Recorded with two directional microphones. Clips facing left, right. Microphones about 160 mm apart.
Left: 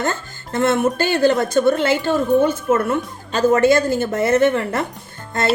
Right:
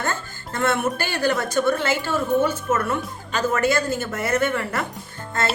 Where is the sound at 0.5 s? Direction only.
25° left (ahead or behind).